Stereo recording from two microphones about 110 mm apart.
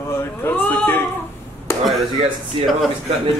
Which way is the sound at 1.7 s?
25° left (ahead or behind).